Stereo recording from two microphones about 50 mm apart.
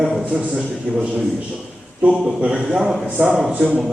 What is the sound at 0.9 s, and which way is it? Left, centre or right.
Speech, right.